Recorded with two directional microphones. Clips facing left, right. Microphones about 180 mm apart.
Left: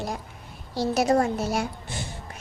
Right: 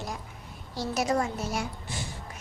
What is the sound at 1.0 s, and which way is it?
Speech, 55° left (ahead or behind).